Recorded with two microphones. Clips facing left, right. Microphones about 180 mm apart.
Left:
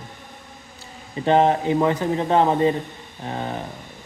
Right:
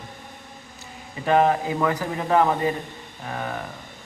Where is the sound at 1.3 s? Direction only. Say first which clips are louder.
Left 2 dB; 25° left (ahead or behind).